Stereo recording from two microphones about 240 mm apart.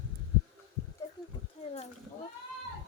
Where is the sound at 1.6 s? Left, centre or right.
Left.